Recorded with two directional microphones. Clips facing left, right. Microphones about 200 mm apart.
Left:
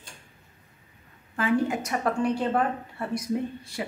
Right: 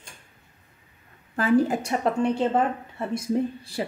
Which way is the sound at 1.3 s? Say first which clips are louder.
Right 4 dB; 35° right (ahead or behind).